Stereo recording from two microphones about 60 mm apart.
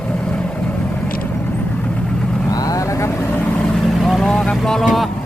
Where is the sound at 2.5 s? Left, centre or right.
Left.